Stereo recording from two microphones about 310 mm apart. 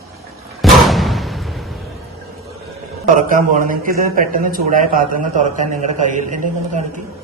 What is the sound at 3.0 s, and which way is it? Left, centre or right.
Speech, right.